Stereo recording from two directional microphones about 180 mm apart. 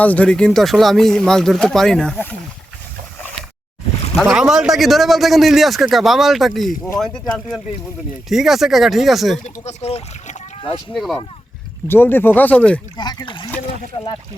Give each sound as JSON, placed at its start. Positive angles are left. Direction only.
{"t": 0.0, "sound": "a man's voice", "side_deg": 10}
{"t": 4.2, "sound": "a man's voice", "side_deg": -5}
{"t": 9.6, "sound": "speech", "side_deg": 35}
{"t": 10.9, "sound": "a man's voice", "side_deg": 0}
{"t": 11.9, "sound": "speech", "side_deg": 10}
{"t": 13.0, "sound": "speech", "side_deg": 25}